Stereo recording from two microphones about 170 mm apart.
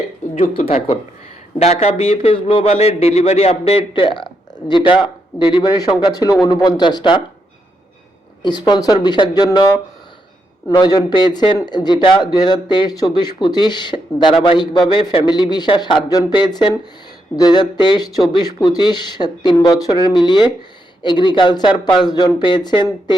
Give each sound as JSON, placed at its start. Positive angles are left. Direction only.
{"t": 0.6, "sound": "a man's voice", "side_deg": 35}
{"t": 8.4, "sound": "a man's voice", "side_deg": 25}
{"t": 10.7, "sound": "a man's voice", "side_deg": 25}